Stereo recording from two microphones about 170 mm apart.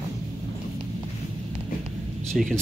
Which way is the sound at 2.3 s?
Centre (ahead or behind).